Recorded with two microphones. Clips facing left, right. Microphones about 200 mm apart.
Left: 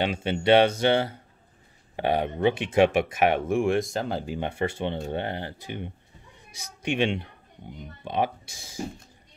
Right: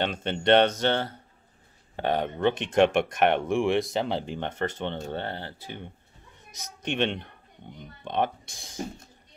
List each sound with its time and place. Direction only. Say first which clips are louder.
0.0 s speech: left 2 dB; 10° left (ahead or behind)